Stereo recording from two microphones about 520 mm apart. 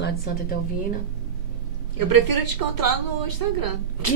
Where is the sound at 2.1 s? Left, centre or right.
Right.